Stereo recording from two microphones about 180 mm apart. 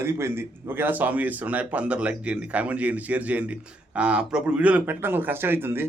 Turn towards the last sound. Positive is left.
turn(degrees=-10)  # may be behind; listen again after turning